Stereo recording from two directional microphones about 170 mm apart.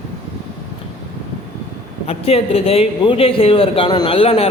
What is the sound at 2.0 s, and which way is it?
A man's voice, 35° left (ahead or behind).